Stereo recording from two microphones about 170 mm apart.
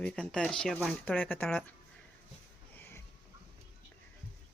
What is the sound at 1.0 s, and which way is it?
Speech, 10° left (ahead or behind).